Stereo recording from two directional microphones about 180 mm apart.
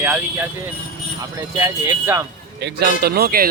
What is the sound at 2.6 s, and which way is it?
Speech, 65° right (ahead or behind).